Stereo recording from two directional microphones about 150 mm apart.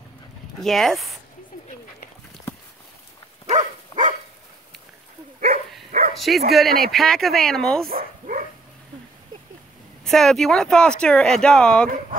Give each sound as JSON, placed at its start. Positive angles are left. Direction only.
{"t": 0.6, "sound": "speech", "side_deg": 0}
{"t": 3.4, "sound": "a sound", "side_deg": -55}
{"t": 5.4, "sound": "dog", "side_deg": -55}
{"t": 6.1, "sound": "speech", "side_deg": 0}
{"t": 7.9, "sound": "dog", "side_deg": -70}
{"t": 10.0, "sound": "speech", "side_deg": 0}